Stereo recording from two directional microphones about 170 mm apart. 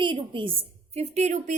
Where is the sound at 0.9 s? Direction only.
40° right (ahead or behind).